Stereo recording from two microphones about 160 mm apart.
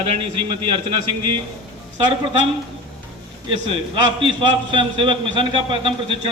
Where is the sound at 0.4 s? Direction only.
35° right (ahead or behind).